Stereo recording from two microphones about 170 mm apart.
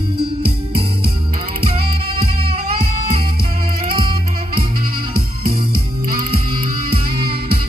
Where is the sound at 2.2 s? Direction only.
65° right (ahead or behind).